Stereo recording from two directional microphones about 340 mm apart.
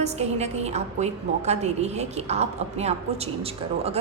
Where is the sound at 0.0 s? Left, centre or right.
Centre.